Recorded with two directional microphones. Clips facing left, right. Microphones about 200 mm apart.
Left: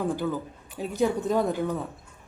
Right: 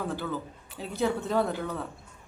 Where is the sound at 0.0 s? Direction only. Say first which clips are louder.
Left 5 dB; 15° left (ahead or behind).